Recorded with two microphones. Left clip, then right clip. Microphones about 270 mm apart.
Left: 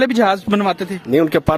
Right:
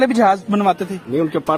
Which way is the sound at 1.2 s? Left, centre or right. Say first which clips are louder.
Left 4 dB; left.